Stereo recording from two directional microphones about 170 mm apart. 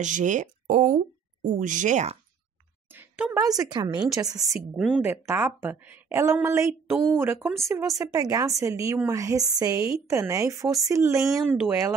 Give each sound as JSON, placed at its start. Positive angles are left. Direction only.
{"t": 0.0, "sound": "speech", "side_deg": -45}
{"t": 2.9, "sound": "a sound", "side_deg": -10}
{"t": 3.3, "sound": "a woman's voice", "side_deg": -20}
{"t": 4.5, "sound": "a woman's voice", "side_deg": -5}
{"t": 11.3, "sound": "speech", "side_deg": -5}